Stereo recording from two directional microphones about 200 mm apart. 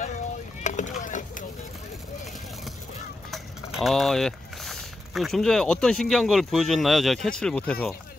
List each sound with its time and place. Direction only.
0.7 s rowboat: 40° left (ahead or behind)
3.3 s speech: centre (ahead or behind)